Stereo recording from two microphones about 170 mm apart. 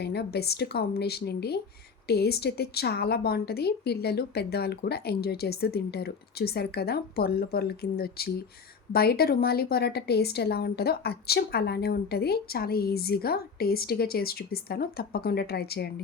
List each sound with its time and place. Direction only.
0.0 s a woman's voice: 70° left (ahead or behind)